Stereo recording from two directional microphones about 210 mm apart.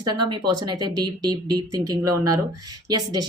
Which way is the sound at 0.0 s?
20° right (ahead or behind).